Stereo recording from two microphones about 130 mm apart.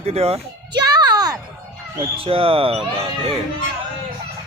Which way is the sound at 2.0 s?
45° right (ahead or behind).